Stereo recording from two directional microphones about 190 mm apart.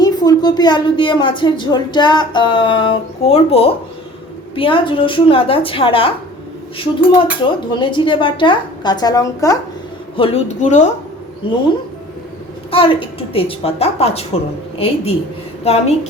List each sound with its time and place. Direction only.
0.0 s a woman's voice: 20° left (ahead or behind)
10.2 s a woman's voice: 30° left (ahead or behind)
11.4 s a woman's voice: 25° left (ahead or behind)
12.7 s a woman's voice: 30° left (ahead or behind)